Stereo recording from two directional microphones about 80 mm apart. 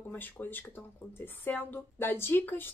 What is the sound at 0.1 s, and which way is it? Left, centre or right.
Speech, left.